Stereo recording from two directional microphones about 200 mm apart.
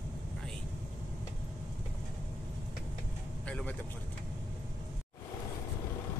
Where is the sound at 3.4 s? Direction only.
5° left (ahead or behind).